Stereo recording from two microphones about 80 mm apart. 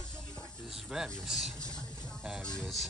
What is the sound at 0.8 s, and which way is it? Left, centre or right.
Speech, centre.